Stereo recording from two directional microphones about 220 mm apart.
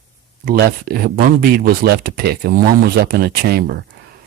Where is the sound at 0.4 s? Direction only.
45° right (ahead or behind).